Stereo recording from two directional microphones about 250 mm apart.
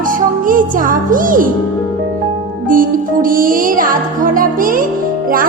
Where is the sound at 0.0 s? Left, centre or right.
Right.